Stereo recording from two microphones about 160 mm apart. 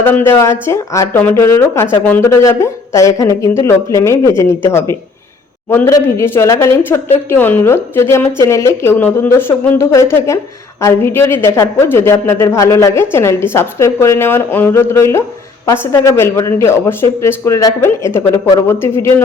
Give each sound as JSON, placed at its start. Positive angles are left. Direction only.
{"t": 0.0, "sound": "speech", "side_deg": 10}